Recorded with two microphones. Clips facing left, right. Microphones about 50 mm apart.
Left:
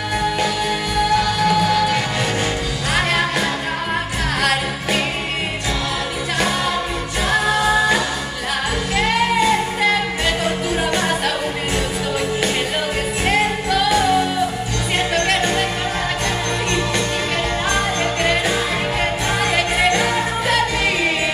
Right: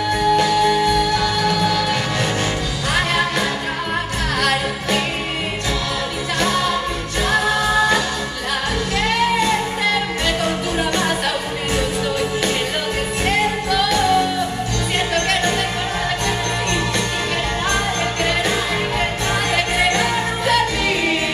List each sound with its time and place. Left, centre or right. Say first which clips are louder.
0.5 s music: right 6 dB; centre
4.4 s music: even; centre
7.2 s music: left 1 dB; centre
10.8 s music: even; centre
13.2 s music: left 1 dB; centre
19.5 s music: left 1 dB; centre